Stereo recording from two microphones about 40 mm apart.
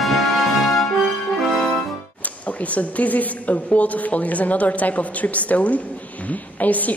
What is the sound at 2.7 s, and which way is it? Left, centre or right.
A woman's voice, left.